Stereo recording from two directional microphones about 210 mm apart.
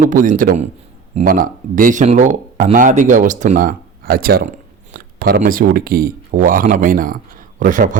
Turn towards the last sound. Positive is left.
turn(degrees=-40)  # may be behind; listen again after turning